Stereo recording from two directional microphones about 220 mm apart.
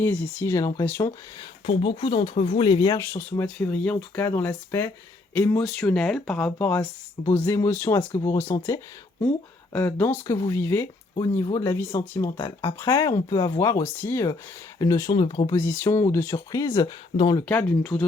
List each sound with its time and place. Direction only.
0.0 s speech: 10° left (ahead or behind)
1.6 s speech: 25° left (ahead or behind)
17.5 s speech: 5° left (ahead or behind)